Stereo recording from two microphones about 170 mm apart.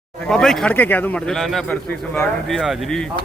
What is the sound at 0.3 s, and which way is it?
A man's voice, 5° left (ahead or behind).